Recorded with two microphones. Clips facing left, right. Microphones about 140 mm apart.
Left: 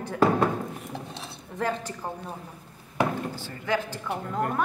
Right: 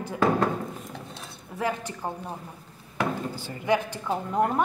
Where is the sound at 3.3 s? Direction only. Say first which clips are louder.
Right 3 dB; 15° right (ahead or behind).